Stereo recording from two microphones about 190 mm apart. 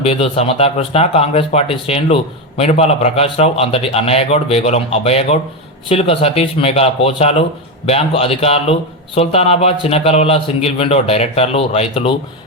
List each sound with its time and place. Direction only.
0.0 s speech: 30° left (ahead or behind)